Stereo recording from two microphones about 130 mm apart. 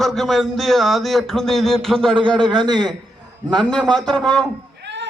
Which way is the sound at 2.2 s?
35° right (ahead or behind).